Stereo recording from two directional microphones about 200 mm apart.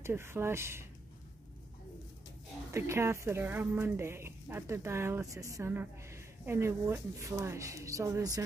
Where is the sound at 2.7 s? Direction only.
15° right (ahead or behind).